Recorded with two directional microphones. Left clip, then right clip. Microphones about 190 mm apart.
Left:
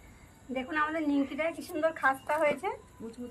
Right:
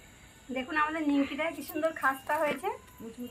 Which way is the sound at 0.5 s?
Centre (ahead or behind).